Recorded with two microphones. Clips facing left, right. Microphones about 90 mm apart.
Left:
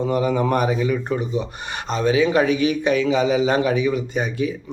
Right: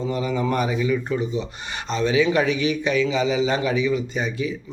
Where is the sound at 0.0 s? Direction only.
50° left (ahead or behind).